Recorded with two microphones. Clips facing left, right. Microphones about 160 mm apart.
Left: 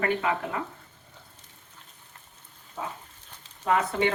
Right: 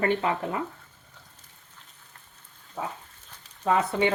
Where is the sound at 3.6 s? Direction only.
20° right (ahead or behind).